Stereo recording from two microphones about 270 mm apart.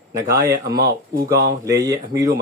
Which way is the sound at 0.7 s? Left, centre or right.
Right.